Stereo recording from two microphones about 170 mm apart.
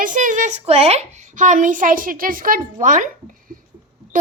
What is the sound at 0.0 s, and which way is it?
A child's voice, 50° right (ahead or behind).